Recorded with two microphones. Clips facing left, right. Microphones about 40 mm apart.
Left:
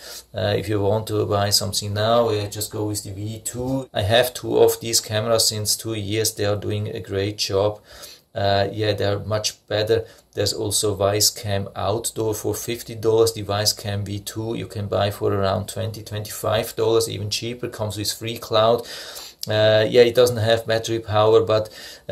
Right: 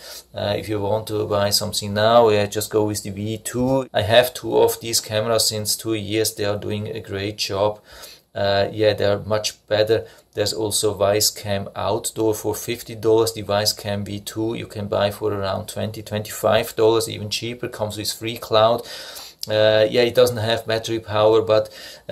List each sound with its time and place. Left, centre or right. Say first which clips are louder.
0.4 s speech: left 1 dB; centre
1.7 s speech: right 6 dB; centre
2.2 s speech: right 6 dB; right
3.9 s speech: right 2 dB; centre
4.4 s speech: left 1 dB; centre
15.2 s speech: left 2 dB; centre
16.1 s speech: right 6 dB; right; by 22.1 s centre